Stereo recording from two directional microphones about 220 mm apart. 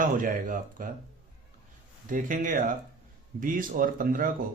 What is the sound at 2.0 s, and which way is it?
Speech, 35° right (ahead or behind).